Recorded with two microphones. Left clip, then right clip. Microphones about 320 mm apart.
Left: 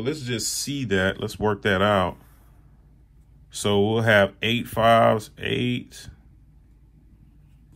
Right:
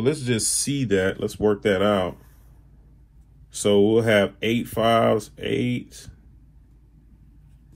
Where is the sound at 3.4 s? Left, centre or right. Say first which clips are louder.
Right 4 dB; left.